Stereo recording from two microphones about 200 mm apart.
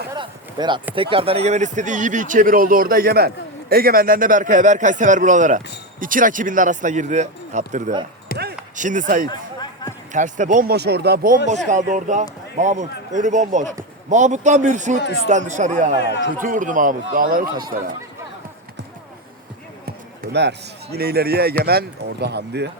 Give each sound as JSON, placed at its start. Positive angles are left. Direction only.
{"t": 0.1, "sound": "a sound", "side_deg": -25}
{"t": 0.9, "sound": "speech", "side_deg": -25}
{"t": 8.3, "sound": "basketball bounce", "side_deg": 45}
{"t": 8.7, "sound": "speech", "side_deg": -40}
{"t": 9.3, "sound": "a sound", "side_deg": 20}
{"t": 10.1, "sound": "speech", "side_deg": -40}
{"t": 11.7, "sound": "speech", "side_deg": -35}
{"t": 14.9, "sound": "a man's voice", "side_deg": 60}
{"t": 15.3, "sound": "speech", "side_deg": -35}
{"t": 16.0, "sound": "a man's voice", "side_deg": 60}
{"t": 16.4, "sound": "speech", "side_deg": -40}
{"t": 20.3, "sound": "speech", "side_deg": -55}